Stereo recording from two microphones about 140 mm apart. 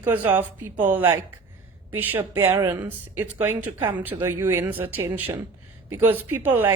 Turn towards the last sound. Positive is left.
turn(degrees=-15)  # may be behind; listen again after turning